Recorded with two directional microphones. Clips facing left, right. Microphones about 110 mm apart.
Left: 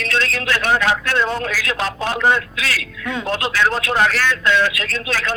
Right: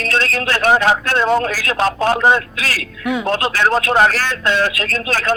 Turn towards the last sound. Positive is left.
turn(degrees=-40)  # may be behind; listen again after turning